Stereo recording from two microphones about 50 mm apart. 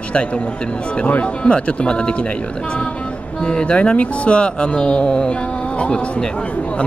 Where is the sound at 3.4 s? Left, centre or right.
Left.